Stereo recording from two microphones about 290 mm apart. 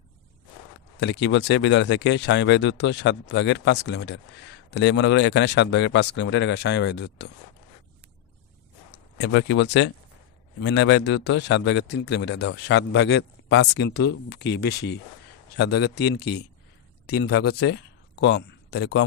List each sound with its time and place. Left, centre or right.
0.9 s speech: left
8.9 s speech: left